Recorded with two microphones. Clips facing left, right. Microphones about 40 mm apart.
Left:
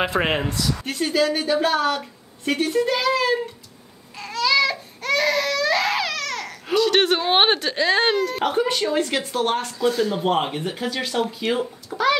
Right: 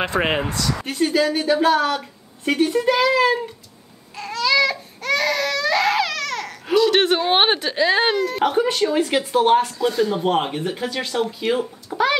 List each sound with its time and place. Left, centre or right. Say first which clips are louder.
0.0 s a woman's voice: right 1 dB; centre
4.2 s baby cry: right 1 dB; centre
9.7 s a woman's voice: right 1 dB; centre